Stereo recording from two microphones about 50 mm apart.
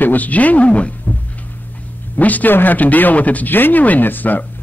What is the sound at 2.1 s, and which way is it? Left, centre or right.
Speech, left.